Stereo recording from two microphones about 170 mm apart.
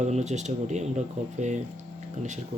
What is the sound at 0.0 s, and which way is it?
Speech, 40° right (ahead or behind).